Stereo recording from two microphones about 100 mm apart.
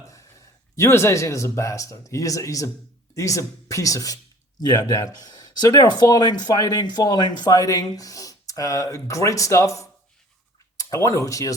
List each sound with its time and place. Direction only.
0.1 s speech: 30° left (ahead or behind)